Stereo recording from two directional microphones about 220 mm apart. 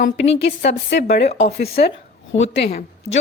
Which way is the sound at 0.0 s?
50° left (ahead or behind).